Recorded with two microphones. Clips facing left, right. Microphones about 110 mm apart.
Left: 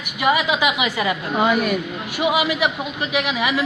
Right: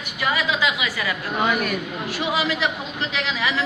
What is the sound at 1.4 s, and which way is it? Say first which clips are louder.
A man's voice: left 4 dB; 5° left (ahead or behind).